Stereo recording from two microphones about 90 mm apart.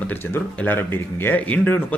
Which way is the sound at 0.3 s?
25° left (ahead or behind).